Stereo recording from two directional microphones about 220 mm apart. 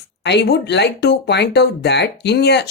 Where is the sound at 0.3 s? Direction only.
50° left (ahead or behind).